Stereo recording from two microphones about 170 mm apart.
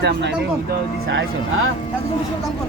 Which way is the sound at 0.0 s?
90° right.